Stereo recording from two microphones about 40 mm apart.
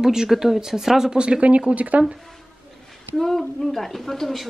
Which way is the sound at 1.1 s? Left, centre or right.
Right.